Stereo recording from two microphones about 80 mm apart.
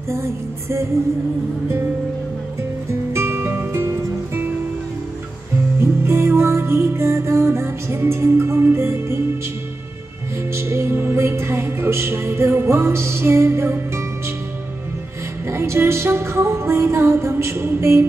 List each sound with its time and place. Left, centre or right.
0.1 s music: right
3.1 s music: right
5.8 s music: right
10.5 s music: right
15.4 s music: right